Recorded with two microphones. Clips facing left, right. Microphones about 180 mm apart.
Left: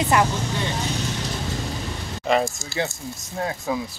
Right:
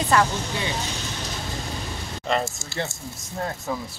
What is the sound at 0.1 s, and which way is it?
Speech, 15° left (ahead or behind).